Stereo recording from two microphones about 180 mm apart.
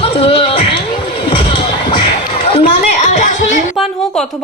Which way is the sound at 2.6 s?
40° left (ahead or behind).